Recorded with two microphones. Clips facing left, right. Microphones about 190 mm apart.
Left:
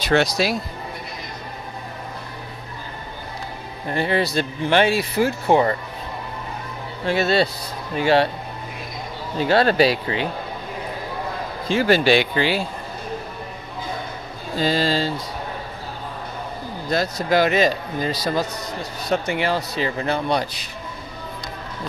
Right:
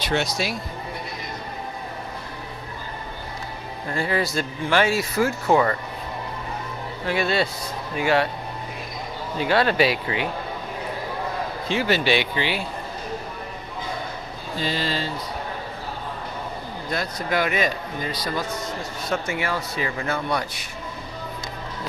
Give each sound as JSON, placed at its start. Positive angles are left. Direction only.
{"t": 0.1, "sound": "speech", "side_deg": 80}
{"t": 3.9, "sound": "speech", "side_deg": 20}
{"t": 7.1, "sound": "speech", "side_deg": 35}
{"t": 9.4, "sound": "speech", "side_deg": 35}
{"t": 11.7, "sound": "speech", "side_deg": 45}
{"t": 14.6, "sound": "speech", "side_deg": 35}
{"t": 16.9, "sound": "speech", "side_deg": 35}